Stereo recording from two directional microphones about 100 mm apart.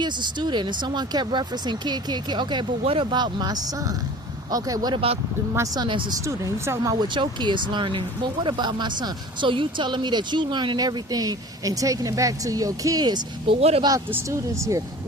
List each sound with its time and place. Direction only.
0.0 s speech: 50° right (ahead or behind)
2.8 s speech: 70° right (ahead or behind)
3.1 s speech: 45° right (ahead or behind)
6.2 s speech: 30° right (ahead or behind)
7.1 s speech: 50° right (ahead or behind)
13.6 s speech: 90° right
14.3 s speech: 30° right (ahead or behind)